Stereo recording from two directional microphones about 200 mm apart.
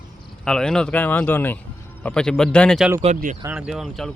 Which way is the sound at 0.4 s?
5° left (ahead or behind).